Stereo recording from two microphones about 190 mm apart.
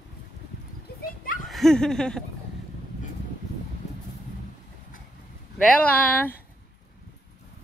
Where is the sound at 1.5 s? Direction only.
Centre (ahead or behind).